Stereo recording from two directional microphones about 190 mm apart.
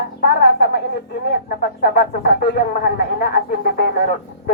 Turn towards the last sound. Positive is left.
turn(degrees=55)  # may be behind; listen again after turning